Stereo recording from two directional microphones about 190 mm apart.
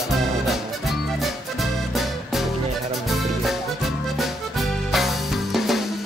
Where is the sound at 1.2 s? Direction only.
Centre (ahead or behind).